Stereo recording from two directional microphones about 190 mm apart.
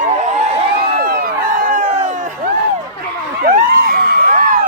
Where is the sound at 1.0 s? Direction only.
45° right (ahead or behind).